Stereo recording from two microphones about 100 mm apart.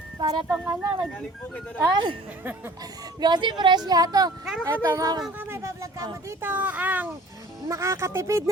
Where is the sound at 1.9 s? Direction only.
50° right (ahead or behind).